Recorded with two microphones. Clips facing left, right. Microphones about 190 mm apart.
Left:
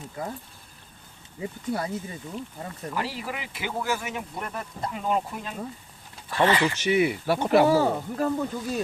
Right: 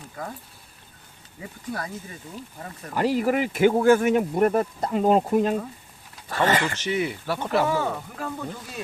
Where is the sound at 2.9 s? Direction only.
45° right (ahead or behind).